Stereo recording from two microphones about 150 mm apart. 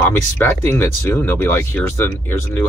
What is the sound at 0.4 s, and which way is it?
Speech, 15° left (ahead or behind).